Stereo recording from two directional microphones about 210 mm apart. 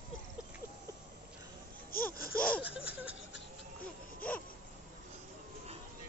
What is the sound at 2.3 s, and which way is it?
Laughter, 5° left (ahead or behind).